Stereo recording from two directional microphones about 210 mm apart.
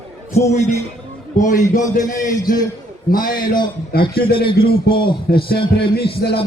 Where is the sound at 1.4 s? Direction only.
35° left (ahead or behind).